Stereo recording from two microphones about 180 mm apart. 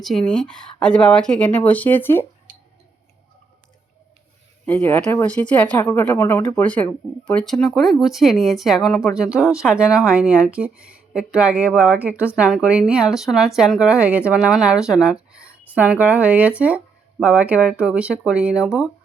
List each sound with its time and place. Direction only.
0.0 s speech: 5° left (ahead or behind)
4.6 s speech: 10° left (ahead or behind)